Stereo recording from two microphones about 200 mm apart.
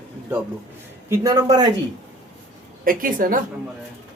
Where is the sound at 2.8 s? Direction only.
45° right (ahead or behind).